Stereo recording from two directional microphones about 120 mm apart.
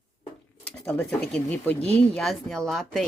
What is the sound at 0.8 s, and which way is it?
Speech, 10° left (ahead or behind).